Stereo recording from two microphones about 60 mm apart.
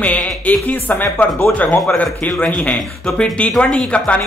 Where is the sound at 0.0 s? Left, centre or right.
Left.